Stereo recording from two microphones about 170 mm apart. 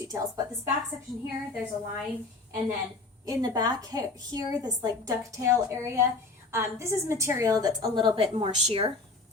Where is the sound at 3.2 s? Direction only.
20° right (ahead or behind).